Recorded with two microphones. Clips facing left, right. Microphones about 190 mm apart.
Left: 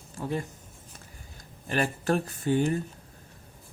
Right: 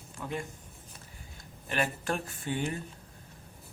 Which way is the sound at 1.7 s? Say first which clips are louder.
Left 5 dB; 40° left (ahead or behind).